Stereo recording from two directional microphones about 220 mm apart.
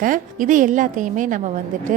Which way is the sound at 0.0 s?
35° right (ahead or behind).